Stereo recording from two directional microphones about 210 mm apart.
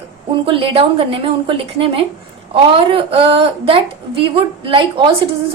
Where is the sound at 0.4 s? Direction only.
25° right (ahead or behind).